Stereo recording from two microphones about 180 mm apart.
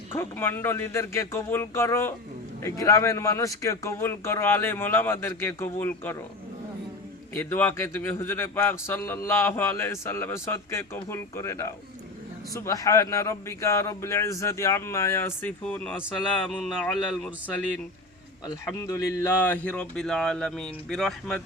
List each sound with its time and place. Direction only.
0.2 s a man's voice: 10° left (ahead or behind)
7.3 s a man's voice: 10° left (ahead or behind)
18.9 s a man's voice: 15° left (ahead or behind)